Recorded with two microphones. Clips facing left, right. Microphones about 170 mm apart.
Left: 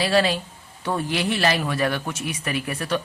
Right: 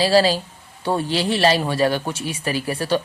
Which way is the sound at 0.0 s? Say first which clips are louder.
Right 4 dB; 30° right (ahead or behind).